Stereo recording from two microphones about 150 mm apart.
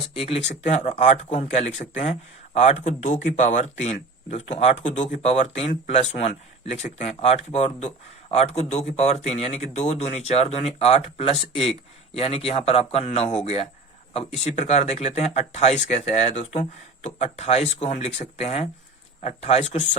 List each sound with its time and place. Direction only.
0.2 s speech: 45° left (ahead or behind)